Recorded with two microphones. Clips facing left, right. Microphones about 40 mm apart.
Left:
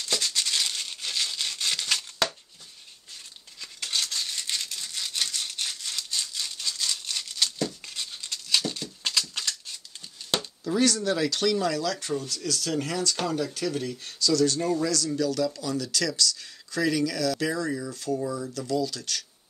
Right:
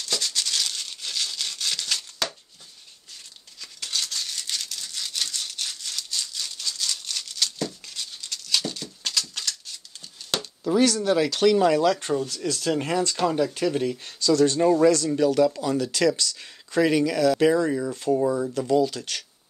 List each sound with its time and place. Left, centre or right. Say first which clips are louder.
0.0 s a sound: even; centre
3.6 s a sound: even; centre
9.3 s scissors: even; centre
10.6 s speech: right 4 dB; centre
11.5 s speech: right 7 dB; right
18.1 s speech: right 7 dB; right